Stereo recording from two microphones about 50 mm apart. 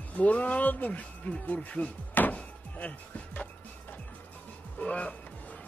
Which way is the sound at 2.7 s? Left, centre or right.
Left.